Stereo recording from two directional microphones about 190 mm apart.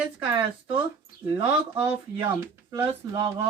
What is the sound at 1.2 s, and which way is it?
Speech, 10° right (ahead or behind).